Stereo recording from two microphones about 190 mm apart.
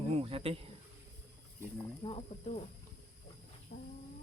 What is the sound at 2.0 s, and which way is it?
Speech, 30° left (ahead or behind).